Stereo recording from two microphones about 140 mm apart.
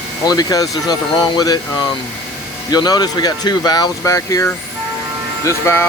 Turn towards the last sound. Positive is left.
turn(degrees=20)  # may be behind; listen again after turning